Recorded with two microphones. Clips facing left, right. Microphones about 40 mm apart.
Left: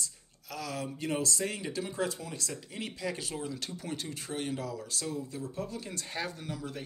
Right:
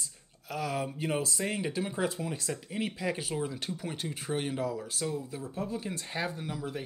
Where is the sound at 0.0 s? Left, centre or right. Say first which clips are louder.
Left 2 dB; right.